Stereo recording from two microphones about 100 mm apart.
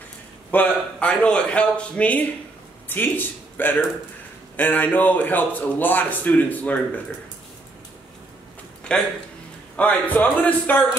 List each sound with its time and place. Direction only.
0.5 s a man's voice: 15° left (ahead or behind)
8.9 s a man's voice: 10° left (ahead or behind)